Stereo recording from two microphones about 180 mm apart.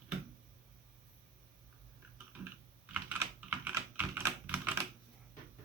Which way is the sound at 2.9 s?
10° right (ahead or behind).